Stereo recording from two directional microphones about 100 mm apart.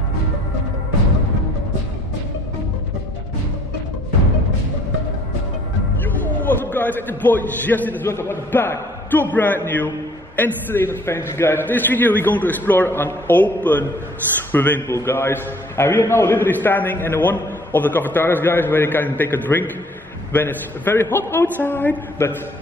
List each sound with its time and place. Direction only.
6.0 s a man's voice: 20° left (ahead or behind)